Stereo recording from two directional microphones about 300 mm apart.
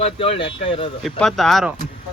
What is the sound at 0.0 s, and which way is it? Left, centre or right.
Speech, centre.